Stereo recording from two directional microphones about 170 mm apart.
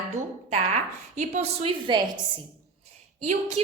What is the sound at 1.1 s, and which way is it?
Speech, 45° right (ahead or behind).